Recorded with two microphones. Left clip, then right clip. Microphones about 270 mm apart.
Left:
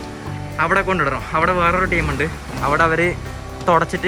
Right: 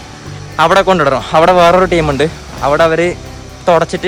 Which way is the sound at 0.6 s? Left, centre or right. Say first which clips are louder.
Right 9 dB; centre.